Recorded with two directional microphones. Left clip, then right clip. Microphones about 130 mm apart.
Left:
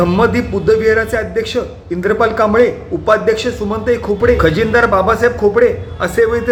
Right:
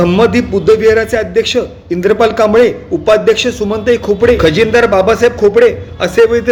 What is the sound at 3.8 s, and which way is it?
A man's voice, 50° right (ahead or behind).